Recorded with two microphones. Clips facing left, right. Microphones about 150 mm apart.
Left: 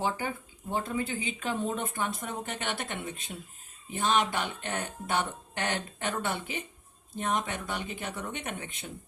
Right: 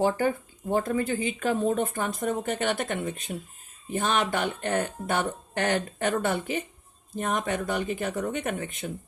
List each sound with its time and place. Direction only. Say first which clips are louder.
0.0 s speech: right 8 dB; 50° right (ahead or behind)